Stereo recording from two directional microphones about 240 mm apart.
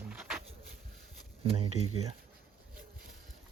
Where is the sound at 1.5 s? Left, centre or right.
Right.